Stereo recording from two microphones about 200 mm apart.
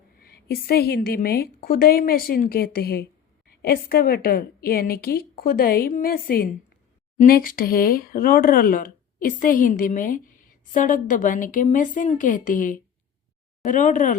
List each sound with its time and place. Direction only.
0.2 s speech: 50° left (ahead or behind)